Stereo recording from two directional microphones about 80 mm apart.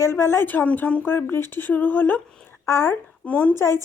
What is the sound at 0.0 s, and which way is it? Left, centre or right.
A woman's voice, left.